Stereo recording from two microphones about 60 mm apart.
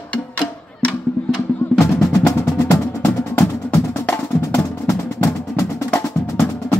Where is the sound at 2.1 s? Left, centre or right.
Left.